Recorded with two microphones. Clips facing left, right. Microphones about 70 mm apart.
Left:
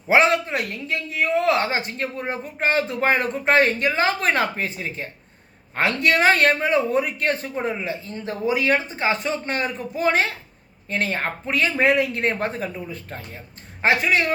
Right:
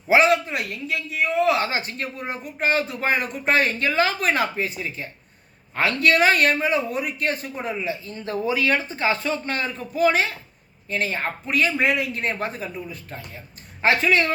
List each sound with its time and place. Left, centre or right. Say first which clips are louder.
0.1 s a man's voice: even; left
10.0 s a man's voice: right 1 dB; left
13.8 s speech: even; centre